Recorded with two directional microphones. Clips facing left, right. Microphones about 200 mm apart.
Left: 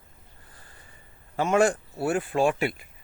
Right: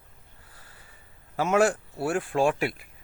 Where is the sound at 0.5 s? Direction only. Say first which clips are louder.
Left 1 dB; 5° right (ahead or behind).